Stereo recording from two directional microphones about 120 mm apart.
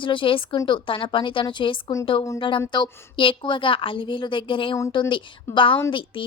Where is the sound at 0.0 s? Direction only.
45° left (ahead or behind).